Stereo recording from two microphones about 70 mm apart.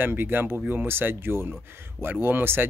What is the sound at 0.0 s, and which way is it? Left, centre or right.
Speech, right.